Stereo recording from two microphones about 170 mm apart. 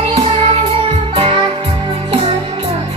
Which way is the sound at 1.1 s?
30° right (ahead or behind).